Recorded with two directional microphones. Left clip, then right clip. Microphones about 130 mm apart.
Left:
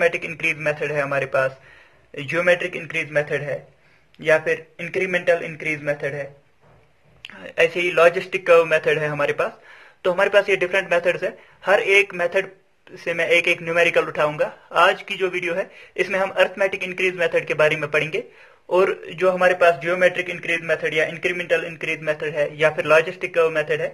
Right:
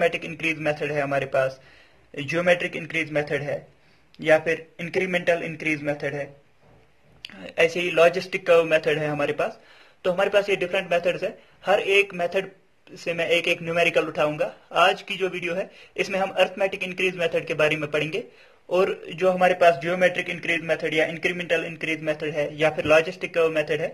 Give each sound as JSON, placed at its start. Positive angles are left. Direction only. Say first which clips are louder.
{"t": 0.0, "sound": "a man's voice", "louder": "left 3 dB", "side_deg": -40}
{"t": 9.7, "sound": "a sound", "louder": "left 3 dB", "side_deg": -30}
{"t": 10.6, "sound": "a man's voice", "louder": "left 4 dB", "side_deg": -30}